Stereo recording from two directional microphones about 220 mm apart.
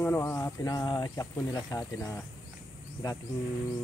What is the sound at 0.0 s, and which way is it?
Speech, 10° left (ahead or behind).